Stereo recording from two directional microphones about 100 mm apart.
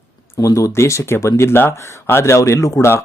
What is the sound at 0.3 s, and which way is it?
Speech, 35° left (ahead or behind).